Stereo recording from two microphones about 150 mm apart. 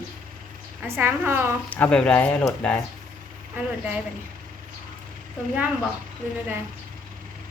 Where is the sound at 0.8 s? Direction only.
15° right (ahead or behind).